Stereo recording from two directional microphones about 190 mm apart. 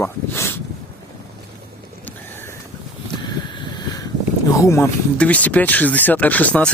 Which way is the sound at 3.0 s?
25° left (ahead or behind).